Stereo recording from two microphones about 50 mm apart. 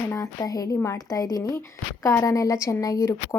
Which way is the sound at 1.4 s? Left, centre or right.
Left.